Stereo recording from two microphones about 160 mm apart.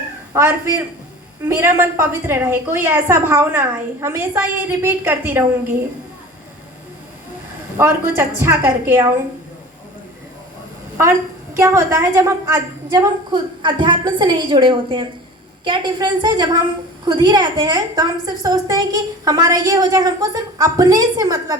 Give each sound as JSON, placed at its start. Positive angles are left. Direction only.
{"t": 0.3, "sound": "a woman's voice", "side_deg": -20}
{"t": 7.8, "sound": "a woman's voice", "side_deg": -15}
{"t": 11.5, "sound": "a woman's voice", "side_deg": -20}